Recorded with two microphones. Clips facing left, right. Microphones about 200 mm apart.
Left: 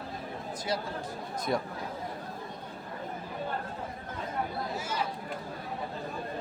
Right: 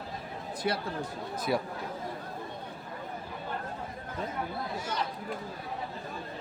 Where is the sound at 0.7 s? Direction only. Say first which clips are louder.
Right 2 dB; 65° right (ahead or behind).